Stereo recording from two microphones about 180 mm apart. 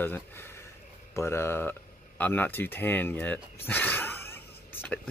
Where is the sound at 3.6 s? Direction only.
10° left (ahead or behind).